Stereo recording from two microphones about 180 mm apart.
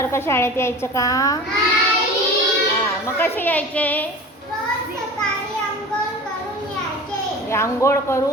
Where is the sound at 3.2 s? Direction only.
10° left (ahead or behind).